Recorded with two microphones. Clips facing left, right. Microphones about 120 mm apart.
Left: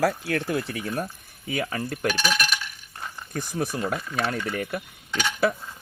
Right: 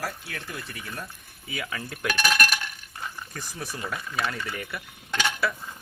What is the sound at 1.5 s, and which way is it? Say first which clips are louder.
Speech: left 6 dB; 40° left (ahead or behind).